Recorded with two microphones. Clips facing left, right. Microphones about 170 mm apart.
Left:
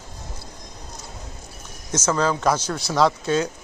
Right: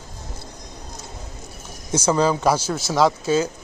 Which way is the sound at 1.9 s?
10° right (ahead or behind).